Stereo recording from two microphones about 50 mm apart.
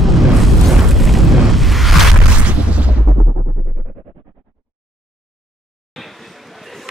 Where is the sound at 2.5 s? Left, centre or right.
Right.